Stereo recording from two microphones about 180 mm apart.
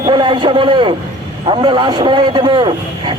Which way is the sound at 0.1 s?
25° right (ahead or behind).